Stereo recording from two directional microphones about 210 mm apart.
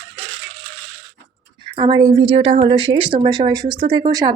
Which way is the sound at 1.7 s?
25° right (ahead or behind).